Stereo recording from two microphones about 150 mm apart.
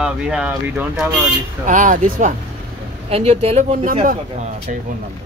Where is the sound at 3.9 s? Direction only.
60° right (ahead or behind).